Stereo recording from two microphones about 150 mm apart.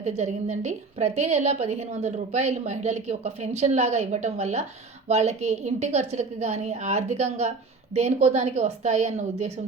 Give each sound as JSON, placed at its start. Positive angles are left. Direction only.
{"t": 0.0, "sound": "a woman's voice", "side_deg": -50}